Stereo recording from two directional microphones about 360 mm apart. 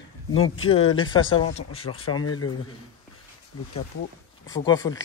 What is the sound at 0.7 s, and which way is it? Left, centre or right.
Speech, centre.